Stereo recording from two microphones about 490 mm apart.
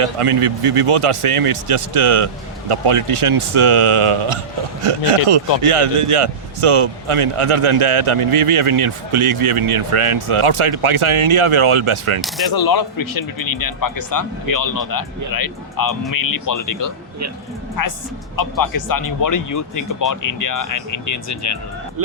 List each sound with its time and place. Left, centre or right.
0.0 s speech: right
12.5 s speech: left
17.8 s a woman's voice: left